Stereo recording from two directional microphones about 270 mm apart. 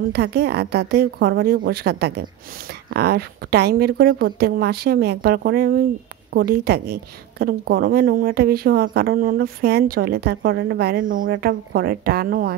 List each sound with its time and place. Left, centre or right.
0.1 s a woman's voice: right